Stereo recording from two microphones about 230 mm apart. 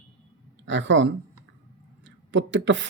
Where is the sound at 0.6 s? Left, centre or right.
Right.